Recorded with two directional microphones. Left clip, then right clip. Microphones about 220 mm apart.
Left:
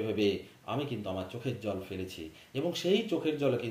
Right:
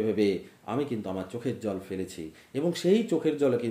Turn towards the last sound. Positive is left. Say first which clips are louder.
# right 5 dB
turn(degrees=-25)  # may be behind; listen again after turning